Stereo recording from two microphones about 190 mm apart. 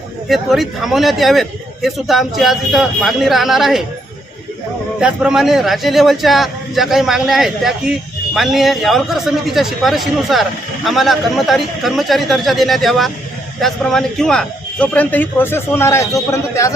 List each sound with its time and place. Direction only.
0.3 s a man's voice: centre (ahead or behind)
4.9 s a man's voice: 5° right (ahead or behind); by 16.7 s 15° left (ahead or behind)